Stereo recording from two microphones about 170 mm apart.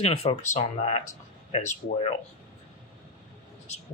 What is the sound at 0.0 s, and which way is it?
Speech, 35° left (ahead or behind).